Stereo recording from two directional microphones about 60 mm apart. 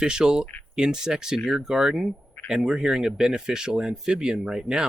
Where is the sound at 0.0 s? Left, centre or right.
Centre.